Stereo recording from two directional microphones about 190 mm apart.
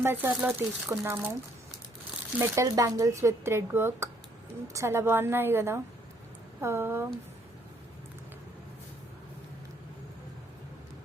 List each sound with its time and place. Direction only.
0.0 s speech: 10° right (ahead or behind)
2.4 s speech: 15° right (ahead or behind)